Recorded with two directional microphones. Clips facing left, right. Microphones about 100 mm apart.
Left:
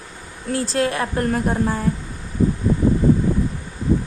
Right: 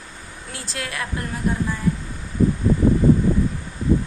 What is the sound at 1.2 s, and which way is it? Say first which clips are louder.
Speech: left 5 dB; 45° left (ahead or behind).